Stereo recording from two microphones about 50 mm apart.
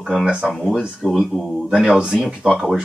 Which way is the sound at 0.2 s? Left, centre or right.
Centre.